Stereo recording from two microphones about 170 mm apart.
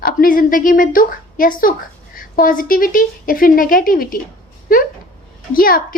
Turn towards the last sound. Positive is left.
turn(degrees=55)  # may be behind; listen again after turning